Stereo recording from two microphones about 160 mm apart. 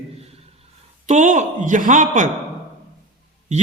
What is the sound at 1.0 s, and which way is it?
A man's voice, 50° right (ahead or behind).